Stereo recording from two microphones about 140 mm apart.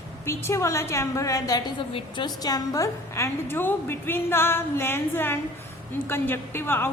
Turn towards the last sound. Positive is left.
turn(degrees=15)  # may be behind; listen again after turning